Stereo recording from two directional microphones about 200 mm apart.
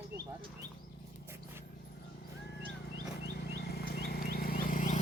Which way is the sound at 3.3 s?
55° left (ahead or behind).